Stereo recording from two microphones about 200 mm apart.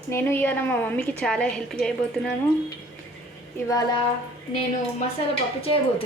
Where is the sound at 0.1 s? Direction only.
10° left (ahead or behind).